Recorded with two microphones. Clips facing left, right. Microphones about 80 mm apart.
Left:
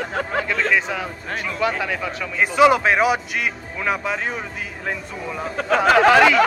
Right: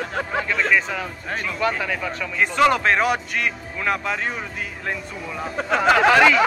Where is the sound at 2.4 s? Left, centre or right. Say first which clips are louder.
Left 3 dB; centre.